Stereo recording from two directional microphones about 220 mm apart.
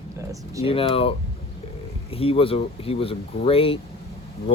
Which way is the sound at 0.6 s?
25° left (ahead or behind).